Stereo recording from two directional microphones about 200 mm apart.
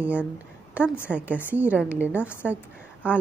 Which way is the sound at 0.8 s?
10° left (ahead or behind).